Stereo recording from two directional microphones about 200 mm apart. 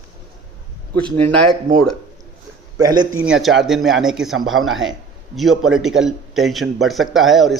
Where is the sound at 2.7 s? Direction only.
20° right (ahead or behind).